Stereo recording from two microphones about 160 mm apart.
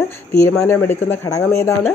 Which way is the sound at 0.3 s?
20° left (ahead or behind).